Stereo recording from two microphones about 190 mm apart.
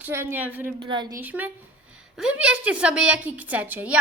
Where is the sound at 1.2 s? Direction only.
10° right (ahead or behind).